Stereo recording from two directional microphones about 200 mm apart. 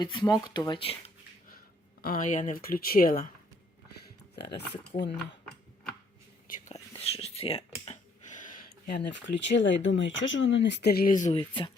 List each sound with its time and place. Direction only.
0.0 s speech: 20° left (ahead or behind)
1.5 s speech: 45° left (ahead or behind)
4.4 s speech: 55° left (ahead or behind)
4.9 s speech: 40° left (ahead or behind)
7.0 s a sound: 30° left (ahead or behind)
9.0 s speech: 60° left (ahead or behind); by 11.3 s 40° left (ahead or behind)
11.3 s speech: 25° left (ahead or behind)